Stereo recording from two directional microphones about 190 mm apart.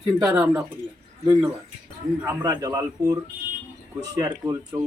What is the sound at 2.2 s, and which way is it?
Speech, 20° right (ahead or behind).